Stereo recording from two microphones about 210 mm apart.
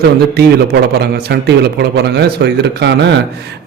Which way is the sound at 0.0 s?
50° right (ahead or behind).